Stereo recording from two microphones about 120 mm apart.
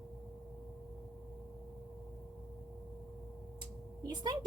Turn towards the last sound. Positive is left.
turn(degrees=-35)  # may be behind; listen again after turning